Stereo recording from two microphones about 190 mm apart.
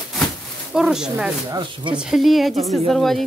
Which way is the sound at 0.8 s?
5° right (ahead or behind).